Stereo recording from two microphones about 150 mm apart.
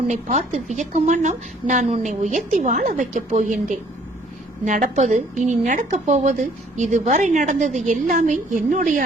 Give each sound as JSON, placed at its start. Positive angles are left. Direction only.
{"t": 0.1, "sound": "a woman's voice", "side_deg": -50}
{"t": 4.6, "sound": "a woman's voice", "side_deg": -60}